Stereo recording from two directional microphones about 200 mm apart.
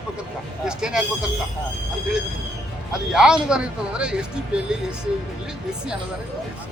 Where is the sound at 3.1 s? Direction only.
5° right (ahead or behind).